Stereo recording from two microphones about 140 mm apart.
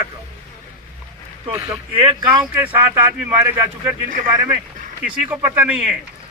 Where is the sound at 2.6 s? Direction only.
15° right (ahead or behind).